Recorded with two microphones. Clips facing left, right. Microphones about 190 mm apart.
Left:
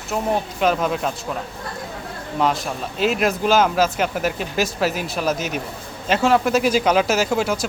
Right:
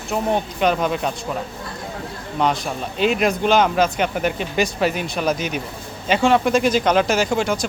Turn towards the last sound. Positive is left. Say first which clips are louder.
# even
turn(degrees=5)  # may be behind; listen again after turning